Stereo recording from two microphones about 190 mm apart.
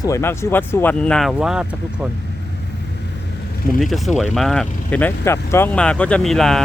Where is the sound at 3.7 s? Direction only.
Centre (ahead or behind).